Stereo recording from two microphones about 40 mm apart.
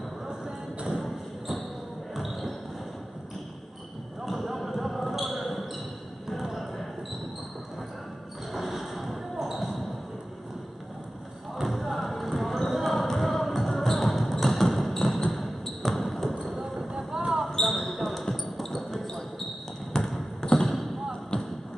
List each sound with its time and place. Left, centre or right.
2.1 s basketball bounce: centre
4.2 s basketball bounce: centre
8.5 s basketball bounce: centre
11.5 s basketball bounce: centre
16.9 s a sound: right
17.6 s basketball bounce: centre
21.3 s a sound: left